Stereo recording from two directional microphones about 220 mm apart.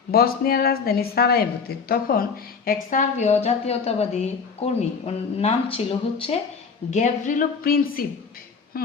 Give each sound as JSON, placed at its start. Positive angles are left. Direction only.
{"t": 0.1, "sound": "a woman's voice", "side_deg": 45}
{"t": 2.9, "sound": "a woman's voice", "side_deg": 30}